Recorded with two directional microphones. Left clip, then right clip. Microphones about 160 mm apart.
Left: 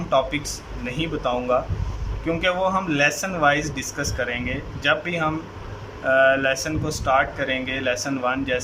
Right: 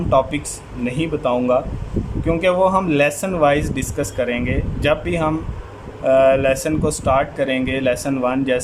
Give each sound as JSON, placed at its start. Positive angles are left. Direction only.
{"t": 0.1, "sound": "speech", "side_deg": -20}